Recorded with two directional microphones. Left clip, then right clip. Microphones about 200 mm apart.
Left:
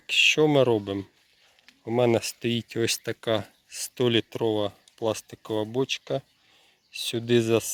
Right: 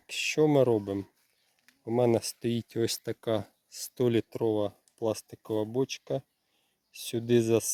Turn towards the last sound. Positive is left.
turn(degrees=0)  # may be behind; listen again after turning